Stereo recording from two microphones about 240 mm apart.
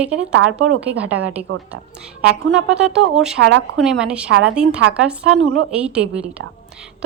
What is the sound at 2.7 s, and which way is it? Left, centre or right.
Speech, centre.